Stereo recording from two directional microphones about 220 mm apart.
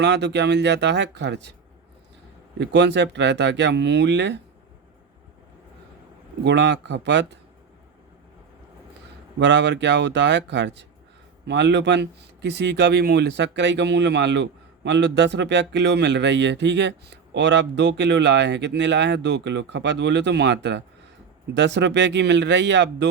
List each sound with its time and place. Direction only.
0.0 s speech: 50° right (ahead or behind)
2.6 s speech: 55° right (ahead or behind)
6.4 s speech: 50° right (ahead or behind)
9.4 s speech: 55° right (ahead or behind)